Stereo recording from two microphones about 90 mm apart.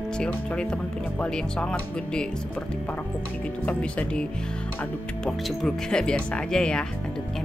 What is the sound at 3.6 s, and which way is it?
Speech, 15° left (ahead or behind).